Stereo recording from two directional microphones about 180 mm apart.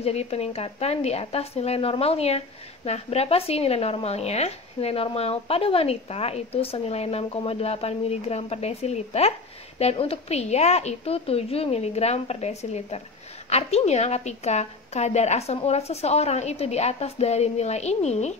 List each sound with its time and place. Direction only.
0.0 s speech: 35° left (ahead or behind)